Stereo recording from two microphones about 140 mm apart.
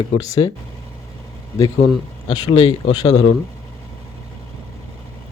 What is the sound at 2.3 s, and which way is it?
Speech, 35° left (ahead or behind).